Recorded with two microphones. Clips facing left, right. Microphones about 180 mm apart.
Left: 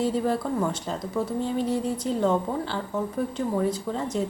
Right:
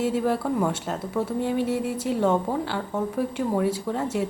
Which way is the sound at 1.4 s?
65° right (ahead or behind).